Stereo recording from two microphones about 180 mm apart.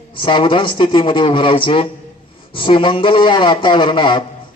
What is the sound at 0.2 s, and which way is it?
A man's voice, 30° left (ahead or behind).